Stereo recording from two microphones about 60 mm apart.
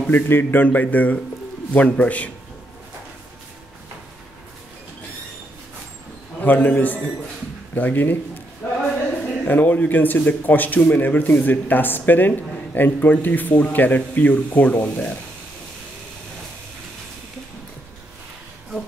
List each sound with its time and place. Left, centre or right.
0.1 s a man's voice: left
6.4 s a man's voice: left
8.6 s a sound: left
9.5 s a man's voice: left